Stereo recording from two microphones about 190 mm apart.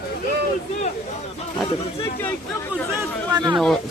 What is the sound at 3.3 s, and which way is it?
Speech, 20° right (ahead or behind).